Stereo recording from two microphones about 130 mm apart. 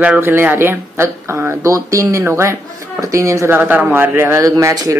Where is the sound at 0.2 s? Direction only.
15° right (ahead or behind).